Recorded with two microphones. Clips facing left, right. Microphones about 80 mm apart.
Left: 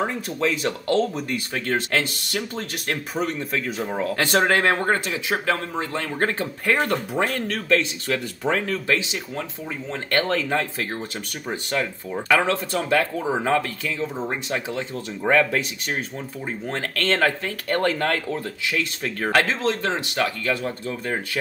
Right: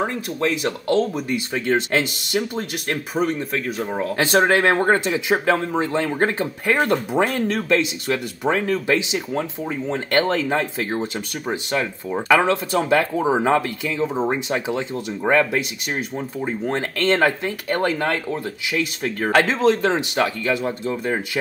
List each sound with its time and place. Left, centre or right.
0.0 s speech: centre
4.1 s speech: centre
6.1 s speech: centre
15.3 s speech: centre
19.3 s speech: right